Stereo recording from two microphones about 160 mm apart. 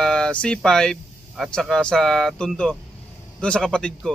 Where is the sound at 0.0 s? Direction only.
5° left (ahead or behind).